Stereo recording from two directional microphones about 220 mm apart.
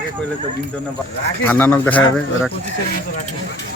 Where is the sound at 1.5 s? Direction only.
10° left (ahead or behind).